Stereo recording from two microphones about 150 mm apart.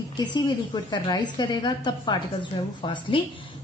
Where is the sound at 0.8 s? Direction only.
30° left (ahead or behind).